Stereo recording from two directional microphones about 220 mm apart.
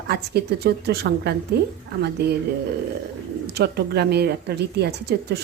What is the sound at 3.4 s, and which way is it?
A woman's voice, 50° right (ahead or behind).